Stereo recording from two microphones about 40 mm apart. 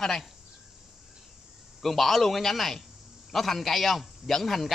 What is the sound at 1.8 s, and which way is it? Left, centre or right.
Speech, centre.